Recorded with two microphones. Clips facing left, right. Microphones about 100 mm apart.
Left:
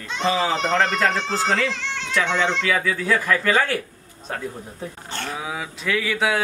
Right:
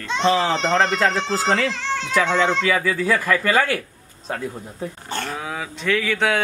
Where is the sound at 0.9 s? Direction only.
Centre (ahead or behind).